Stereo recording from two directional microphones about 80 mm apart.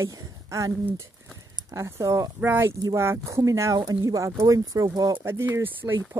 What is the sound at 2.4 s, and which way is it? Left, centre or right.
Speech, right.